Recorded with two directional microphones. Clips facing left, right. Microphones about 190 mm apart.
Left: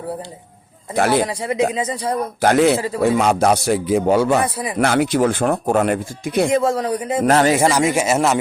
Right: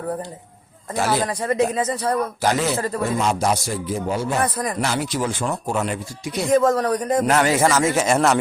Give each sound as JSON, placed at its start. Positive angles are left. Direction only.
{"t": 0.9, "sound": "speech", "side_deg": 60}
{"t": 1.3, "sound": "speech", "side_deg": 10}
{"t": 2.4, "sound": "a man's voice", "side_deg": 60}
{"t": 4.4, "sound": "speech", "side_deg": 10}
{"t": 4.8, "sound": "speech", "side_deg": 55}
{"t": 6.5, "sound": "speech", "side_deg": 10}
{"t": 7.3, "sound": "a man's voice", "side_deg": 35}
{"t": 7.5, "sound": "speech", "side_deg": 15}